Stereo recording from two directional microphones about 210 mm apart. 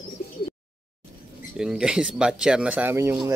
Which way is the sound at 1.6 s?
5° right (ahead or behind).